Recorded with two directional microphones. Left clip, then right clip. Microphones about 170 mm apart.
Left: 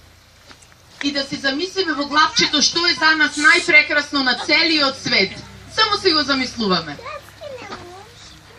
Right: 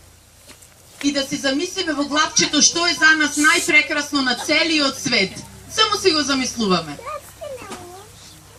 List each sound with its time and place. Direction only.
1.0 s a woman's voice: 65° right (ahead or behind)